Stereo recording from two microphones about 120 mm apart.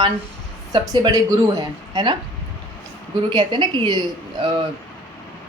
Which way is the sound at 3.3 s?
40° right (ahead or behind).